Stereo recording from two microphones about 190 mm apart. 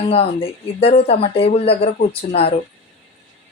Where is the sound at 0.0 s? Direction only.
30° left (ahead or behind).